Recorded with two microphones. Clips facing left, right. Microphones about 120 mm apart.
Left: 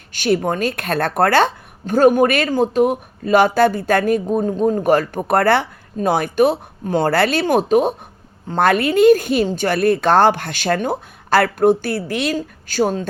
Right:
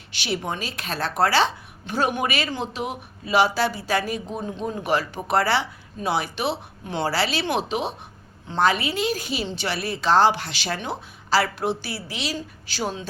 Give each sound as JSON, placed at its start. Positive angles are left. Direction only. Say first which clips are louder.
{"t": 0.1, "sound": "speech", "louder": "left 10 dB", "side_deg": 50}